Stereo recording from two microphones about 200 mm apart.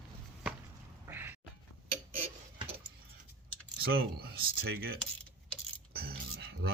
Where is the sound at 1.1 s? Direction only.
10° right (ahead or behind).